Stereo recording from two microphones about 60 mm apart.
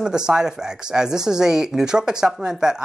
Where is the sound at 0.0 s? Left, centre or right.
Centre.